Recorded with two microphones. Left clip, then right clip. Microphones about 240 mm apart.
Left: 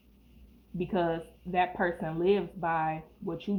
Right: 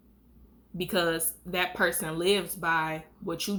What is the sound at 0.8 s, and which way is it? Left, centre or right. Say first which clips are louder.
Speech: right 2 dB; right.